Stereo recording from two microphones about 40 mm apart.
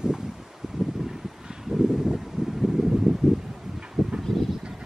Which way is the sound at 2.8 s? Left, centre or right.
Centre.